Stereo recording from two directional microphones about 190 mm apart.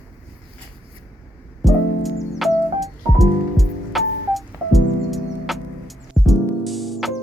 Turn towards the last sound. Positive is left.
turn(degrees=0)  # may be behind; listen again after turning